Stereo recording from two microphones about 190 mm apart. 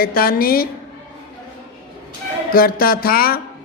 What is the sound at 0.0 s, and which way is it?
Speech, 50° left (ahead or behind).